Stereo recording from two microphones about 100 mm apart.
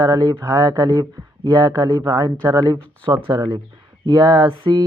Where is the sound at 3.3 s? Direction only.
50° right (ahead or behind).